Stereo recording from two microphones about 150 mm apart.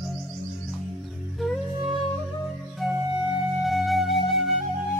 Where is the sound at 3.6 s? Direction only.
Centre (ahead or behind).